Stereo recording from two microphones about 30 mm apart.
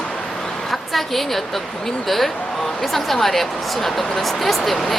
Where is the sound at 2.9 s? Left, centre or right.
Centre.